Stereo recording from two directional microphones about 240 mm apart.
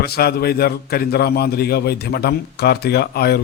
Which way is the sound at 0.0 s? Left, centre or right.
Left.